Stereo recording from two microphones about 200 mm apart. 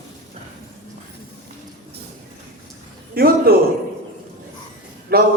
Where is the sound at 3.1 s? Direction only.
50° right (ahead or behind).